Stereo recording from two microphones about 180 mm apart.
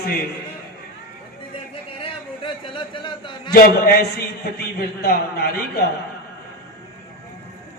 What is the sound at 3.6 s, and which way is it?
A man's voice, 60° left (ahead or behind).